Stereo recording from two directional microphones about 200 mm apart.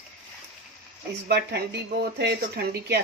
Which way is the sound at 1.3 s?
55° right (ahead or behind).